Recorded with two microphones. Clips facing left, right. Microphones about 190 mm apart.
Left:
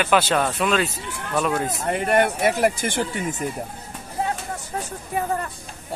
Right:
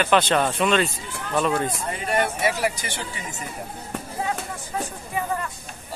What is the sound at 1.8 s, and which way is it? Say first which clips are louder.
Speech: left 5 dB; 60° left (ahead or behind).